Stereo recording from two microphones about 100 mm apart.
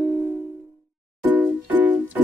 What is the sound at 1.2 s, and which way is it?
Music, 20° right (ahead or behind).